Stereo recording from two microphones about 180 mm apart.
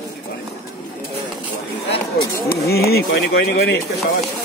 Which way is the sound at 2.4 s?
60° left (ahead or behind).